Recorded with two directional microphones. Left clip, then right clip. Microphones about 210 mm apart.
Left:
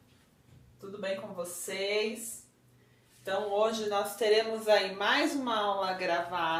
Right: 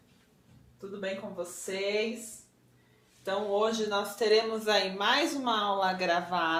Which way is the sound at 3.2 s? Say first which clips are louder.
Even; 40° right (ahead or behind).